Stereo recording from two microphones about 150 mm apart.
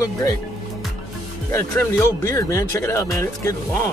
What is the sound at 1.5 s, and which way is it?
Speech, 20° left (ahead or behind).